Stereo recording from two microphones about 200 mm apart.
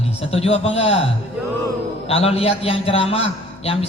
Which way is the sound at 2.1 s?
30° left (ahead or behind).